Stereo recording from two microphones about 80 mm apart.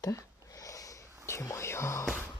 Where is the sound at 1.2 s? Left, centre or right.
Left.